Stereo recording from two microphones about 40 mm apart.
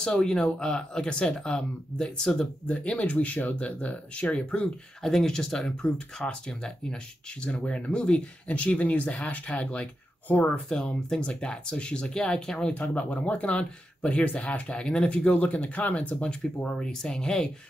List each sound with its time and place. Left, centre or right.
0.0 s speech: centre
2.7 s speech: left
5.0 s speech: centre
8.5 s speech: left
10.2 s speech: left
11.1 s speech: left
12.7 s speech: left
16.8 s speech: centre